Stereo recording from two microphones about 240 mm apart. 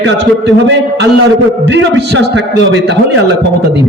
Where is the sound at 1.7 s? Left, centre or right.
Right.